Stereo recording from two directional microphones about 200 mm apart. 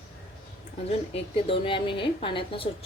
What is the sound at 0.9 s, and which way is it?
A woman's voice, 30° left (ahead or behind).